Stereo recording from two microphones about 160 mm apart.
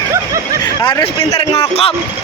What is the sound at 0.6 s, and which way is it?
Speech, 25° left (ahead or behind).